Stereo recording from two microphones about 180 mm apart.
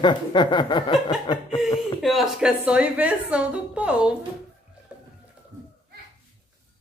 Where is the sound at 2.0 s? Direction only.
Centre (ahead or behind).